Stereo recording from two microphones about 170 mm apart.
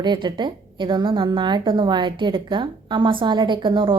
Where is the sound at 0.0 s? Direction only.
25° right (ahead or behind).